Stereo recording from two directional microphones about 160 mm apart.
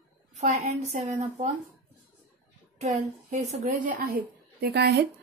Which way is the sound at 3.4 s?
55° right (ahead or behind).